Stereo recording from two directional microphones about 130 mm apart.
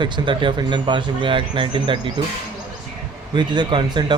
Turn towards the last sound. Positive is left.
turn(degrees=-40)  # may be behind; listen again after turning